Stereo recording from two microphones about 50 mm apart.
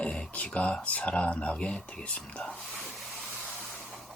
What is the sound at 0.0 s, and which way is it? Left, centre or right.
Speech, left.